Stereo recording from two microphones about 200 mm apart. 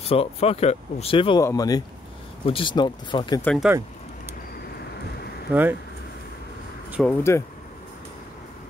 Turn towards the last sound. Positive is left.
turn(degrees=15)  # may be behind; listen again after turning